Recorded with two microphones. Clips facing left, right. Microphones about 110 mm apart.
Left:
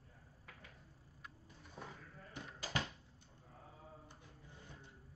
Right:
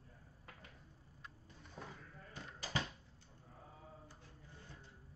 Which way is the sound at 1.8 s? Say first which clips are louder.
Even; 5° left (ahead or behind).